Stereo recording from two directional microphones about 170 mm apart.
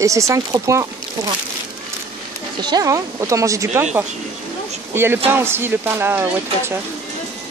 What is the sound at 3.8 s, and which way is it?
A man's voice, 10° right (ahead or behind).